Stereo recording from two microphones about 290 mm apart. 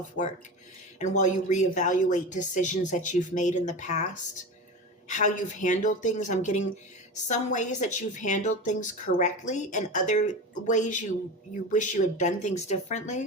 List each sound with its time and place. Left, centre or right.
1.2 s a woman's voice: left